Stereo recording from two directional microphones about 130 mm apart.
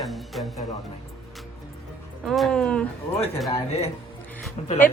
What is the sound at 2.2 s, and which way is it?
Speech, centre (ahead or behind).